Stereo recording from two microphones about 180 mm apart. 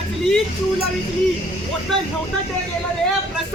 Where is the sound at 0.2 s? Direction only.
Centre (ahead or behind).